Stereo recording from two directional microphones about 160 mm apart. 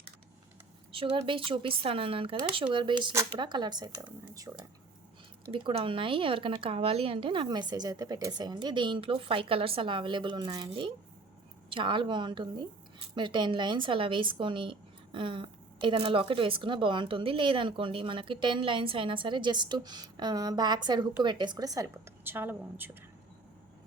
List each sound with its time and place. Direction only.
0.9 s speech: 35° right (ahead or behind)
5.5 s a woman's voice: 35° right (ahead or behind); by 22.9 s 10° right (ahead or behind)